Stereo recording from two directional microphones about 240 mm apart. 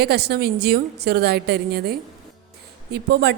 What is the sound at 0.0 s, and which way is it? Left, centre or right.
A woman's voice, right.